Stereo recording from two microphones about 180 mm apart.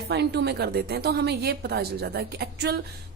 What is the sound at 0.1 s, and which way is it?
A woman's voice, 65° right (ahead or behind).